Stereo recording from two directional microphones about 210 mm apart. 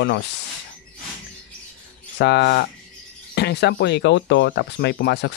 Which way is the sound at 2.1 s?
55° left (ahead or behind).